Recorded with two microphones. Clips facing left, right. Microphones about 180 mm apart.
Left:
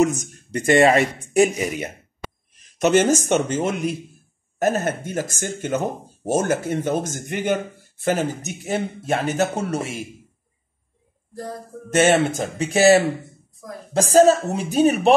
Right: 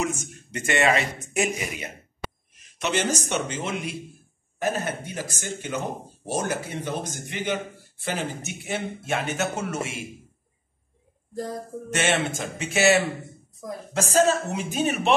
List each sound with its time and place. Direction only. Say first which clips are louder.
0.0 s speech: left 9 dB; 40° left (ahead or behind)
11.9 s speech: left 8 dB; 40° left (ahead or behind)